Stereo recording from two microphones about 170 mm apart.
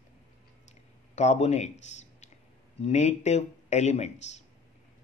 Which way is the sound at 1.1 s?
40° left (ahead or behind).